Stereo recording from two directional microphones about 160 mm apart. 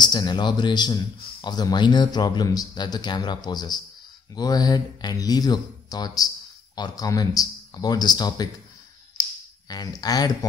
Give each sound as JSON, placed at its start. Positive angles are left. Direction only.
{"t": 0.0, "sound": "speech", "side_deg": 25}
{"t": 9.7, "sound": "speech", "side_deg": 25}